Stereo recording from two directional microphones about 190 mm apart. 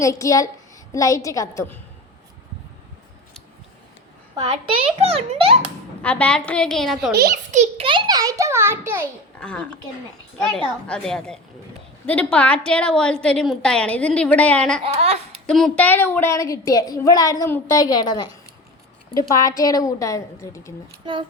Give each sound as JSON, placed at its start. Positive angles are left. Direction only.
{"t": 0.0, "sound": "a woman's voice", "side_deg": 15}
{"t": 4.9, "sound": "a child's voice", "side_deg": -30}
{"t": 6.0, "sound": "a woman's voice", "side_deg": 5}
{"t": 7.5, "sound": "a child's voice", "side_deg": -35}
{"t": 9.4, "sound": "a woman's voice", "side_deg": 5}
{"t": 19.4, "sound": "a woman's voice", "side_deg": 20}
{"t": 21.0, "sound": "speech", "side_deg": -25}